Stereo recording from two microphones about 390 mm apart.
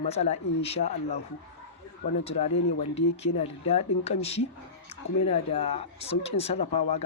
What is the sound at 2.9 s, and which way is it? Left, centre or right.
Speech, centre.